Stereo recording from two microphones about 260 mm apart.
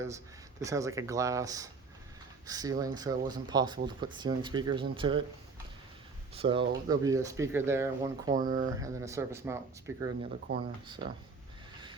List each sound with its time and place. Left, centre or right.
0.6 s speech: centre
6.3 s speech: right
8.4 s speech: right
8.6 s speech: centre